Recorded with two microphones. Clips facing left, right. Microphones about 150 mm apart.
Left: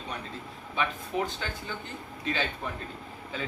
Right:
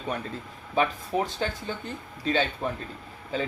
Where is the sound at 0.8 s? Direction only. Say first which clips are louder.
Right 5 dB; 40° right (ahead or behind).